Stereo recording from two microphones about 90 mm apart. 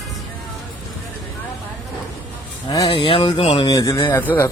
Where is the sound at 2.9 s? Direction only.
85° left; by 3.7 s 60° left (ahead or behind).